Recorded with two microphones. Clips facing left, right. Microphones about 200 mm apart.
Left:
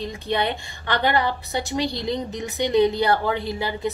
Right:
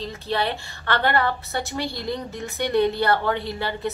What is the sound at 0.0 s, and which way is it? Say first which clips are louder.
Speech: left 1 dB; 15° left (ahead or behind).